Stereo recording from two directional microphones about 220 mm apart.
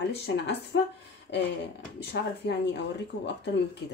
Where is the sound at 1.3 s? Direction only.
50° left (ahead or behind).